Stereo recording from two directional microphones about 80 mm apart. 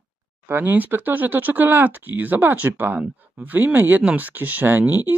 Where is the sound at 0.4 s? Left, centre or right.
Right.